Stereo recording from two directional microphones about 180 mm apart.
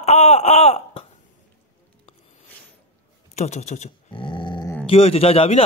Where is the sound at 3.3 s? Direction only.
40° left (ahead or behind).